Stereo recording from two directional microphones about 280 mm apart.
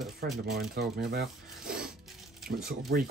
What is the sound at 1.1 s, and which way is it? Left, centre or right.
Rub, right.